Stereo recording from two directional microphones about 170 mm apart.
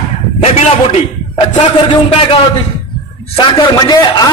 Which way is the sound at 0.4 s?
35° left (ahead or behind).